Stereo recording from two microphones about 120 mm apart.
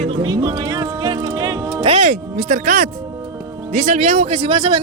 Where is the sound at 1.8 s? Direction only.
60° right (ahead or behind).